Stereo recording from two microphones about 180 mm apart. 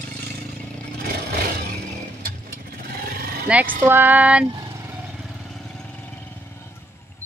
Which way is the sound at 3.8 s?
10° right (ahead or behind).